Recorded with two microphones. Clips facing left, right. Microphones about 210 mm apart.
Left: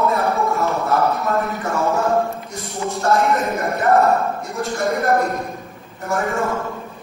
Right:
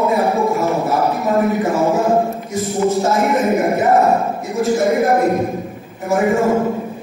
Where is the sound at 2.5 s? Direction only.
Centre (ahead or behind).